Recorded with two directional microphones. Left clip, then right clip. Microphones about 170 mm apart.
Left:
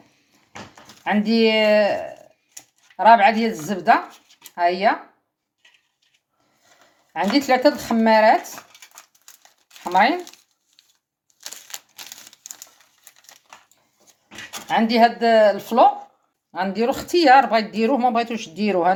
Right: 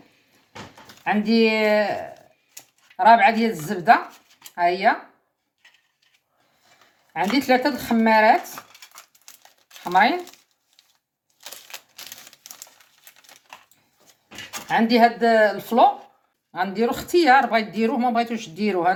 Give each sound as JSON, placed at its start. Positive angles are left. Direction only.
{"t": 1.0, "sound": "speech", "side_deg": 35}
{"t": 7.1, "sound": "speech", "side_deg": 35}
{"t": 9.9, "sound": "speech", "side_deg": 35}
{"t": 11.7, "sound": "crumpling", "side_deg": 25}
{"t": 14.7, "sound": "speech", "side_deg": 35}